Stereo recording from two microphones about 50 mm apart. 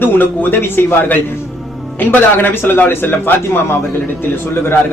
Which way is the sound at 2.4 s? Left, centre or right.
Left.